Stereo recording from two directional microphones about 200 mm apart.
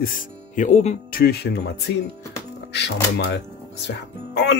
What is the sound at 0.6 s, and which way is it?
Speech, 35° left (ahead or behind).